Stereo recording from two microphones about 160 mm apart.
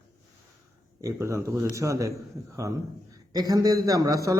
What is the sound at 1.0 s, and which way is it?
A man's voice, 20° right (ahead or behind).